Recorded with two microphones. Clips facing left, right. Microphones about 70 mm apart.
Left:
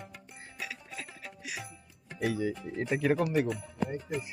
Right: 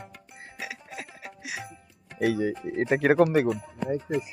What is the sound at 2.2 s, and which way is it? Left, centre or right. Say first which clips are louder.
Speech: right 6 dB; right.